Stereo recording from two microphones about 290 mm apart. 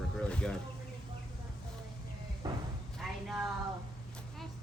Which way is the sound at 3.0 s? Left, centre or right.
Centre.